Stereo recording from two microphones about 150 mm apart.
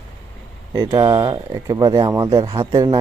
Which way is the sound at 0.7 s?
25° right (ahead or behind).